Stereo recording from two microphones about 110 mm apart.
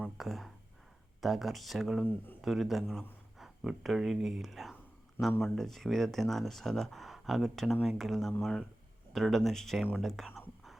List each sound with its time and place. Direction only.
0.0 s speech: centre (ahead or behind)
2.0 s speech: 15° left (ahead or behind)
2.4 s speech: centre (ahead or behind)